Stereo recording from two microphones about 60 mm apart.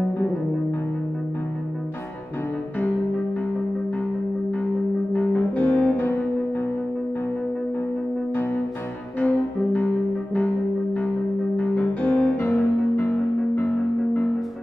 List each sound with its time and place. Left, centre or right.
5.1 s brass instrument: left
9.2 s music: left
11.5 s music: left
12.4 s music: left